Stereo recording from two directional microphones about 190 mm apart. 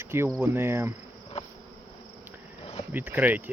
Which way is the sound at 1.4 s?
35° left (ahead or behind).